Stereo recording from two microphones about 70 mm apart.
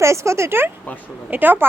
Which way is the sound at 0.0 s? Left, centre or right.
Right.